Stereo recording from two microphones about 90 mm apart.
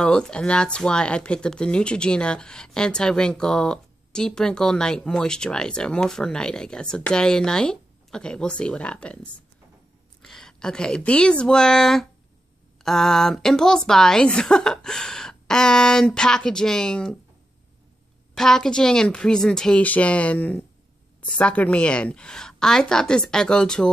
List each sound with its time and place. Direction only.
0.0 s speech: 10° left (ahead or behind)
10.2 s speech: 5° left (ahead or behind)
18.3 s speech: 5° left (ahead or behind)